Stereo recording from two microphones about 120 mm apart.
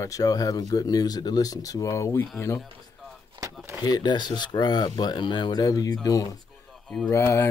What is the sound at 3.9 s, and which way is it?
Speech, 35° left (ahead or behind).